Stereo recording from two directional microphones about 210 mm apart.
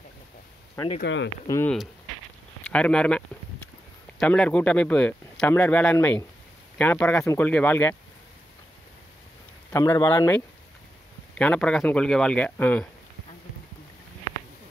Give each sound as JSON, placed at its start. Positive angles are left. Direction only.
{"t": 1.0, "sound": "speech", "side_deg": 55}
{"t": 1.5, "sound": "speech", "side_deg": 10}
{"t": 9.7, "sound": "speech", "side_deg": 15}
{"t": 11.3, "sound": "speech", "side_deg": 5}